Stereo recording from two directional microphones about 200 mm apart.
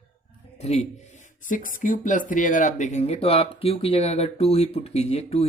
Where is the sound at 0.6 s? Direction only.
35° left (ahead or behind).